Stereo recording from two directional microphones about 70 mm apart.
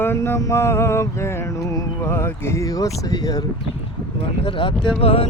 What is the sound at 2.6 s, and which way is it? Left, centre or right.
Speech, left.